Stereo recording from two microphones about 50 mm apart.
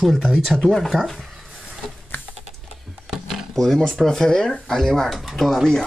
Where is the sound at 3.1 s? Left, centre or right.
Centre.